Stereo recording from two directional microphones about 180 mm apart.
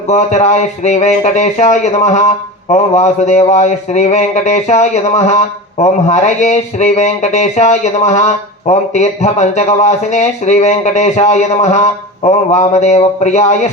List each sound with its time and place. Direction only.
0.1 s a man's voice: 40° left (ahead or behind)